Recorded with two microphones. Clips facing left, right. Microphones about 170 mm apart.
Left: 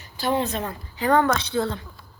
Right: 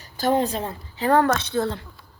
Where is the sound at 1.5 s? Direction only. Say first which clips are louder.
Even; 40° right (ahead or behind).